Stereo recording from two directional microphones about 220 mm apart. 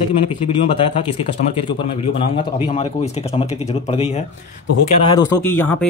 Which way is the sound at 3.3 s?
25° left (ahead or behind).